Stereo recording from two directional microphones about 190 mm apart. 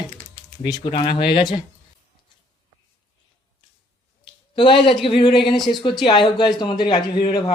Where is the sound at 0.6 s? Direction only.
25° left (ahead or behind).